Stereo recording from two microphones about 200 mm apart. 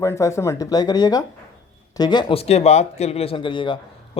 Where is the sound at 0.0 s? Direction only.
15° left (ahead or behind).